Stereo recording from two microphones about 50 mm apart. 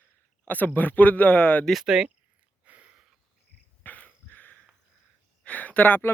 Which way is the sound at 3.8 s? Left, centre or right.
Left.